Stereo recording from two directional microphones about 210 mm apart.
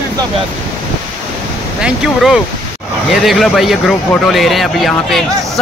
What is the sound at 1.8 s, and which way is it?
A man's voice, 5° right (ahead or behind).